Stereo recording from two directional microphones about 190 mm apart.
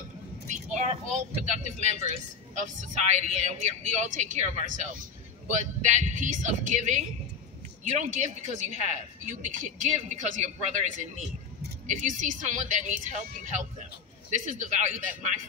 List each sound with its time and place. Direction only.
0.5 s speech: 40° right (ahead or behind)
11.9 s speech: 40° right (ahead or behind)